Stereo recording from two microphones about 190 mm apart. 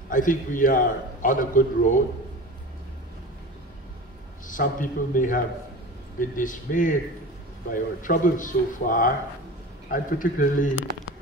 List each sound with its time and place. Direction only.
0.1 s a man's voice: 45° left (ahead or behind)
4.5 s a man's voice: 45° left (ahead or behind)